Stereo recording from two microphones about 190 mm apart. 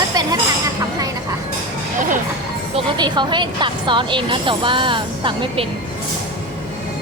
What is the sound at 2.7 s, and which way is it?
Speech, 25° right (ahead or behind).